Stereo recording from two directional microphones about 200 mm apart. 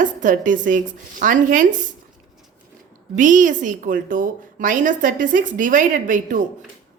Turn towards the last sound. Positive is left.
turn(degrees=-40)  # may be behind; listen again after turning